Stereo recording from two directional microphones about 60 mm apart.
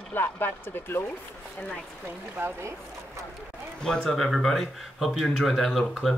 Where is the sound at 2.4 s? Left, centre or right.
Right.